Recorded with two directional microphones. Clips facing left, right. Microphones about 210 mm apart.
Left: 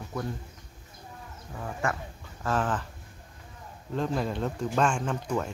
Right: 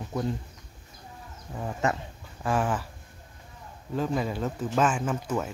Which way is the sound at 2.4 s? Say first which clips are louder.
Right 2 dB; 10° right (ahead or behind).